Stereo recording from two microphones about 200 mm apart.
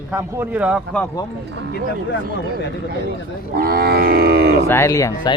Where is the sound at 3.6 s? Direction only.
50° right (ahead or behind).